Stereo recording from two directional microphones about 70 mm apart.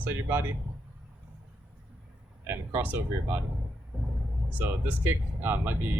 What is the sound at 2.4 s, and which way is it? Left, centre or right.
Speech, right.